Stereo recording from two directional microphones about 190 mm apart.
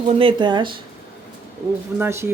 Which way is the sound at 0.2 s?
25° right (ahead or behind).